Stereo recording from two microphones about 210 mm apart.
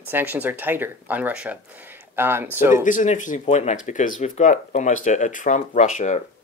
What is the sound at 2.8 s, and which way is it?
Speech, 35° left (ahead or behind).